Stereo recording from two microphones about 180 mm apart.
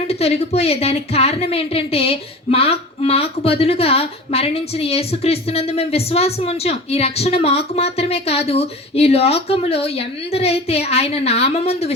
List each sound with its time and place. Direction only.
0.1 s a woman's voice: 35° left (ahead or behind)